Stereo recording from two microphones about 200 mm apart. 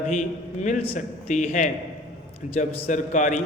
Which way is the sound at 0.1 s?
35° left (ahead or behind).